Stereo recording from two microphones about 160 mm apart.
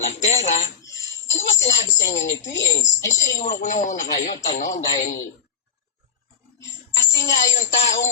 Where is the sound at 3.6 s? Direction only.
50° left (ahead or behind).